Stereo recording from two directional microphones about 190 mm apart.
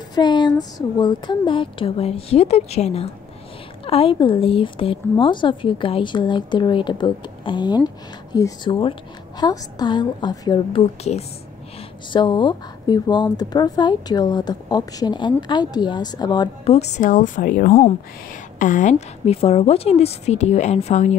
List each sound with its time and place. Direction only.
0.1 s a woman's voice: 25° left (ahead or behind)
16.7 s a woman's voice: 35° left (ahead or behind)